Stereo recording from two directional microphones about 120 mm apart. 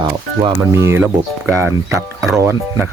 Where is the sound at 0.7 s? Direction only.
25° right (ahead or behind).